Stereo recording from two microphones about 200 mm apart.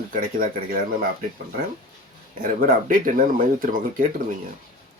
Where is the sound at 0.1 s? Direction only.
45° right (ahead or behind).